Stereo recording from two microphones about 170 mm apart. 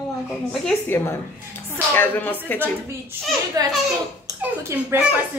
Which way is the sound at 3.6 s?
20° right (ahead or behind).